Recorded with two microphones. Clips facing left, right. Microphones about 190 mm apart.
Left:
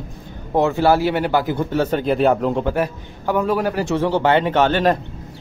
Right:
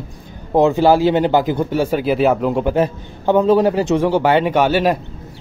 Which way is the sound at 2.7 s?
25° right (ahead or behind).